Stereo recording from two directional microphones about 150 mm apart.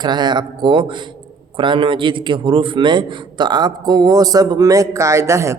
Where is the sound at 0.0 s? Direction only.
30° right (ahead or behind).